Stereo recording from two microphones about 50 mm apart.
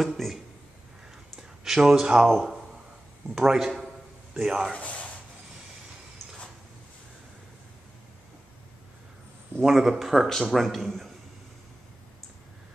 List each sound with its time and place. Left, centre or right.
0.0 s speech: centre
1.6 s speech: centre
2.0 s a man's voice: centre
3.3 s a man's voice: centre
4.7 s speech: left
9.6 s speech: centre